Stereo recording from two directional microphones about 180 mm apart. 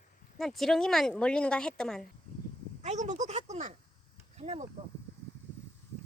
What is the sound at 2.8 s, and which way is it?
Speech, 40° right (ahead or behind).